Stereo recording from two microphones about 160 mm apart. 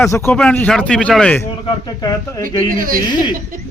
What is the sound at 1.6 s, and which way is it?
Speech, 25° left (ahead or behind).